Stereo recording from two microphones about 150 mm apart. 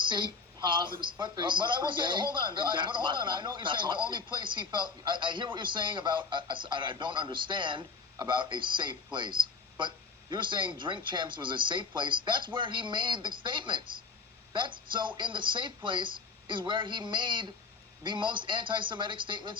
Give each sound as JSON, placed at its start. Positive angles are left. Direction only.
{"t": 0.1, "sound": "a woman's voice", "side_deg": -30}